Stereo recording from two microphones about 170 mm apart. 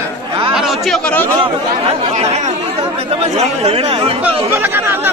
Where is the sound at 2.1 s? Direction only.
40° right (ahead or behind).